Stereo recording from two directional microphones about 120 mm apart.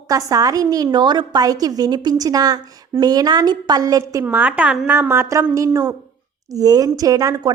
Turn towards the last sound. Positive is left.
turn(degrees=-30)  # may be behind; listen again after turning